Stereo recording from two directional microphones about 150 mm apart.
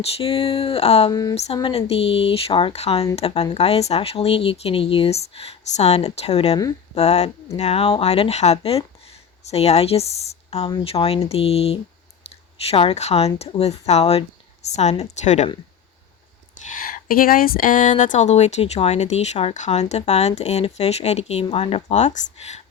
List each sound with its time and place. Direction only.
0.0 s speech: 40° left (ahead or behind)
1.1 s speech: 25° left (ahead or behind)
1.7 s speech: 40° left (ahead or behind)
16.6 s speech: 70° left (ahead or behind); by 22.6 s 50° left (ahead or behind)